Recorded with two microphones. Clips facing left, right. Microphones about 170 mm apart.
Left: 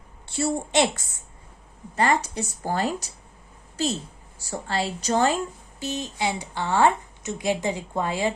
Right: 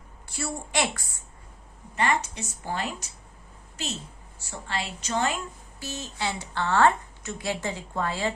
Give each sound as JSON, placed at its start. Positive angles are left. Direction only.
{"t": 0.3, "sound": "a woman's voice", "side_deg": 25}
{"t": 2.0, "sound": "a woman's voice", "side_deg": 35}
{"t": 4.4, "sound": "a woman's voice", "side_deg": 35}
{"t": 5.8, "sound": "a woman's voice", "side_deg": 20}